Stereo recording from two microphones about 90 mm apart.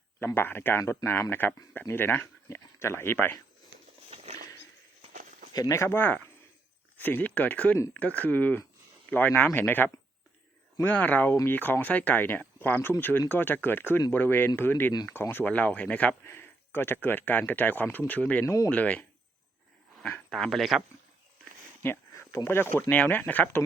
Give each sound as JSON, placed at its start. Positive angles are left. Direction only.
{"t": 0.2, "sound": "speech", "side_deg": 25}
{"t": 5.5, "sound": "speech", "side_deg": 40}
{"t": 16.2, "sound": "speech", "side_deg": 25}
{"t": 18.4, "sound": "speech", "side_deg": 35}
{"t": 18.7, "sound": "speech", "side_deg": 15}
{"t": 20.3, "sound": "speech", "side_deg": 5}
{"t": 21.8, "sound": "a sound", "side_deg": 25}
{"t": 22.4, "sound": "speech", "side_deg": 25}